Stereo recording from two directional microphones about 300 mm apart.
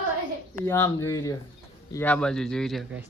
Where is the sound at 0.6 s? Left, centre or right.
Centre.